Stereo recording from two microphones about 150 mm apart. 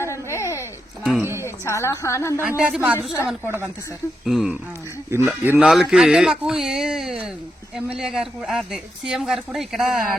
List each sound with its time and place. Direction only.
0.0 s a sound: 20° left (ahead or behind)
1.2 s speech: 15° right (ahead or behind)
1.5 s a woman's voice: 20° left (ahead or behind)
2.4 s speech: 10° right (ahead or behind)
5.1 s speech: 15° right (ahead or behind)
5.5 s speech: 5° right (ahead or behind)